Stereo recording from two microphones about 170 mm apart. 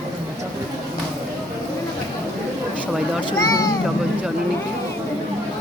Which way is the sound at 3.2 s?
25° left (ahead or behind).